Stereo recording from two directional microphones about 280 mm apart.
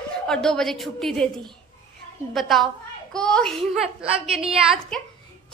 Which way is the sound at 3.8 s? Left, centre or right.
Right.